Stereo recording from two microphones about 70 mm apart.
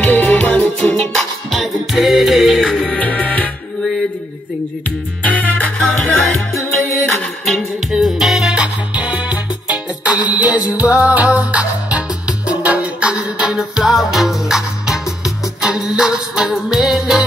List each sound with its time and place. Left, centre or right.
0.0 s music: left
1.1 s music: centre
2.9 s music: centre
5.2 s music: centre
5.8 s music: centre
13.1 s music: centre